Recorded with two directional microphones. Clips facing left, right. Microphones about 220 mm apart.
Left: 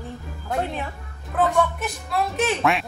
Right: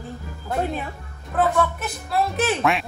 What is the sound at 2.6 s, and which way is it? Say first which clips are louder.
Speech: even; centre (ahead or behind).